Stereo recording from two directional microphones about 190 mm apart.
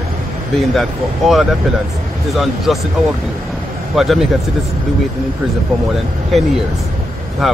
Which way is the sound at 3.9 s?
Centre (ahead or behind).